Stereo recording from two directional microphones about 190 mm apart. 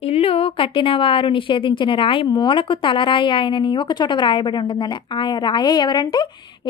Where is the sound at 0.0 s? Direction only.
30° left (ahead or behind).